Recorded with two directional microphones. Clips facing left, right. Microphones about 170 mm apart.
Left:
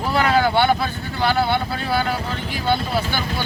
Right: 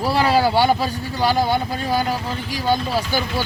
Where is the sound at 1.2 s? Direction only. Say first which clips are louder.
Right 1 dB; 10° right (ahead or behind).